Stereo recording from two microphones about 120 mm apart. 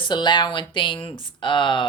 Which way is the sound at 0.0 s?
40° left (ahead or behind).